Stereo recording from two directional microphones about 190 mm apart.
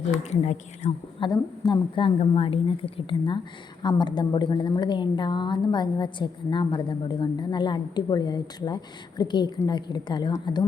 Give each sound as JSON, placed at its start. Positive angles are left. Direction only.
{"t": 0.2, "sound": "a woman's voice", "side_deg": 35}